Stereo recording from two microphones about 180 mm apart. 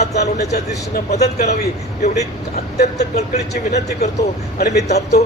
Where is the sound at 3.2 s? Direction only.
40° left (ahead or behind).